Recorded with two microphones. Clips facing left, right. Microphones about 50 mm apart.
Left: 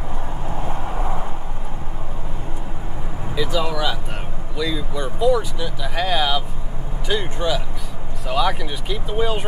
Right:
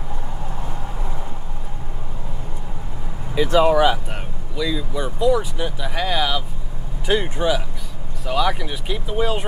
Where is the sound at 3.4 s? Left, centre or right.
Right.